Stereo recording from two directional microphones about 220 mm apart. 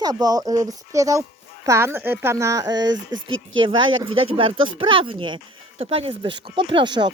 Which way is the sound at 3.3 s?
65° right (ahead or behind).